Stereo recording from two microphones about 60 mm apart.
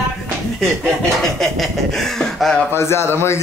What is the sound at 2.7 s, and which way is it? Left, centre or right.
Speech, left.